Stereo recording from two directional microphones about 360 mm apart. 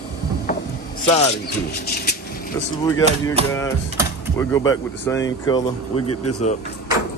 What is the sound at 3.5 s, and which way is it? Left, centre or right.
Speech, centre.